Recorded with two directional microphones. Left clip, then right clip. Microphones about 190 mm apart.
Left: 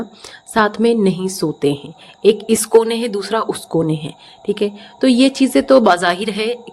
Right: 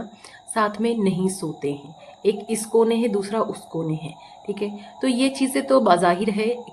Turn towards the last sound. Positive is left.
turn(degrees=40)  # may be behind; listen again after turning